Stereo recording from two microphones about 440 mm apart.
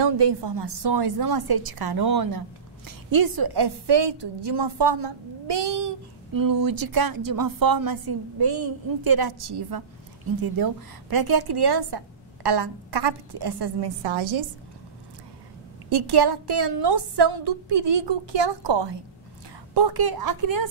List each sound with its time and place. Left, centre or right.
0.0 s a woman's voice: right
6.3 s a woman's voice: right
15.9 s a woman's voice: right